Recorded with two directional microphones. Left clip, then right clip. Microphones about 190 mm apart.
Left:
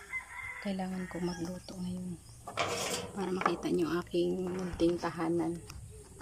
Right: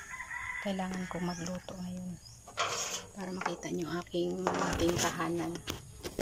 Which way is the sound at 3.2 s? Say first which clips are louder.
Left 6 dB; 10° left (ahead or behind).